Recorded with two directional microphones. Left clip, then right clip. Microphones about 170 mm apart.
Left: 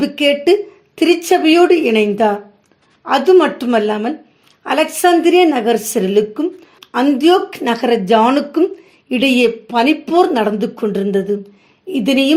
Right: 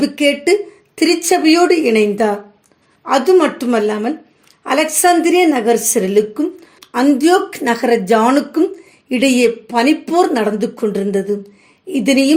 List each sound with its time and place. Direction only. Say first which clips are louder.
0.0 s a woman's voice: left 1 dB; 30° left (ahead or behind)